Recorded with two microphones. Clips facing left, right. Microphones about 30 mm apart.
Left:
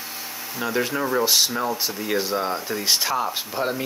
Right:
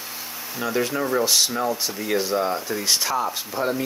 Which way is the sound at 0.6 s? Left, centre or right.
Centre.